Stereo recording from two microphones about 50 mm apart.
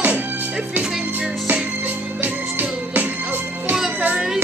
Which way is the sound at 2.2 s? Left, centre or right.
Right.